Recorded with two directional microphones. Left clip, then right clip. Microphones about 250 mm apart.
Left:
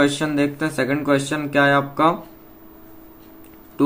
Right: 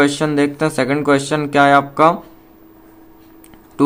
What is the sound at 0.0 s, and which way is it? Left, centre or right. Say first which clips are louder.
Speech: right 4 dB; right.